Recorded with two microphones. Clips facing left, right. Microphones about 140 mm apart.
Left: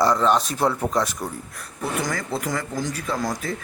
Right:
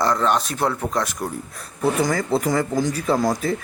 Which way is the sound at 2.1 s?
30° right (ahead or behind).